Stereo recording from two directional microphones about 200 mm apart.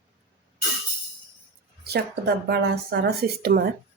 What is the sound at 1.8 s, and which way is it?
Speech, 55° right (ahead or behind).